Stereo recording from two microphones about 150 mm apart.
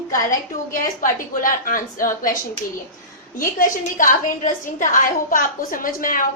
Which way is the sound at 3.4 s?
65° left (ahead or behind).